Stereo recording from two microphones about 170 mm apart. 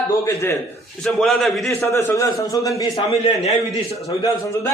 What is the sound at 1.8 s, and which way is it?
A man's voice, 15° left (ahead or behind).